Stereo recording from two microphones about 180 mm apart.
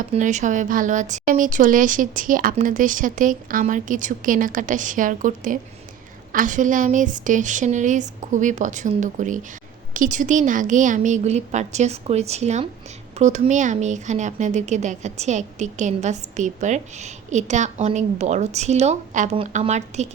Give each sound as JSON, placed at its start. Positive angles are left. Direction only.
{"t": 0.1, "sound": "a woman's voice", "side_deg": -40}